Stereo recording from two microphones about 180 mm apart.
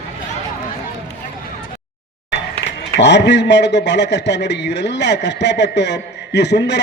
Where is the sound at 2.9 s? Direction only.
70° left (ahead or behind).